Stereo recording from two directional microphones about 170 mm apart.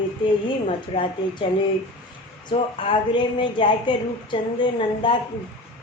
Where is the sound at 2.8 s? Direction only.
30° left (ahead or behind).